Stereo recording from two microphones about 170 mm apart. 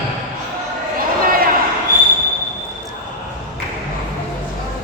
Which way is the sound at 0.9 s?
55° right (ahead or behind).